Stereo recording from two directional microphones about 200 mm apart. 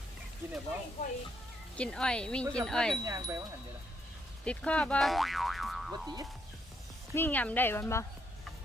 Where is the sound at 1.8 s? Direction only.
5° left (ahead or behind).